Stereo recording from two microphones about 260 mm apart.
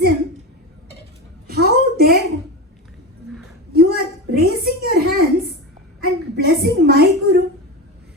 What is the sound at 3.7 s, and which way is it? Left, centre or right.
A woman's voice, right.